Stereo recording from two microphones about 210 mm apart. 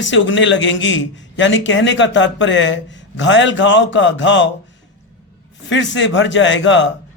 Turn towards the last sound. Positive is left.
turn(degrees=60)  # may be behind; listen again after turning